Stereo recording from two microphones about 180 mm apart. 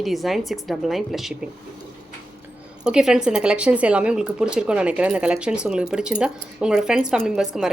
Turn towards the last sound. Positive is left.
turn(degrees=-5)  # may be behind; listen again after turning